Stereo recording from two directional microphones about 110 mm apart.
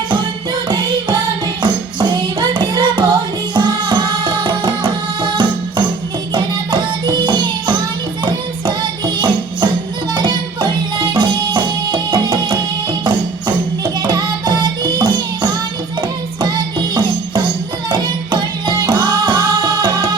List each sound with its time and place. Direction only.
0.7 s music: 40° right (ahead or behind)